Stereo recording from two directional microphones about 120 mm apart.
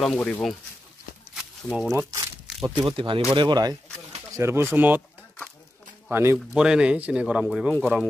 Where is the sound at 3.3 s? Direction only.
35° right (ahead or behind).